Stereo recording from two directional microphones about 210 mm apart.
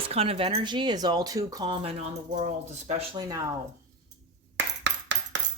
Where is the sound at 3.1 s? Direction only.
20° right (ahead or behind).